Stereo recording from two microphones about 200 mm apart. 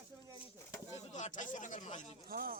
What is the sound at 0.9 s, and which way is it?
Speech, 35° left (ahead or behind).